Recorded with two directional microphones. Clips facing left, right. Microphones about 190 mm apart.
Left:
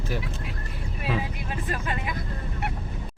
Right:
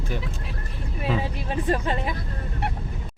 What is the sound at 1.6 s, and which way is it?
Speech, 35° right (ahead or behind).